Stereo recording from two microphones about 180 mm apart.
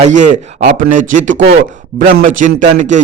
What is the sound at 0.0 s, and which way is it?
A man's voice, 40° right (ahead or behind).